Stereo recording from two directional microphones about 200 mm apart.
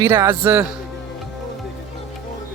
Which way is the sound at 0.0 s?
10° right (ahead or behind).